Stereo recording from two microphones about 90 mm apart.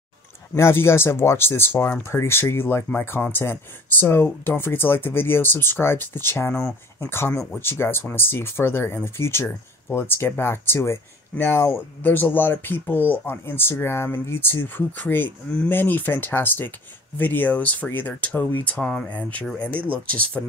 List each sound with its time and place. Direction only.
0.6 s speech: 30° left (ahead or behind)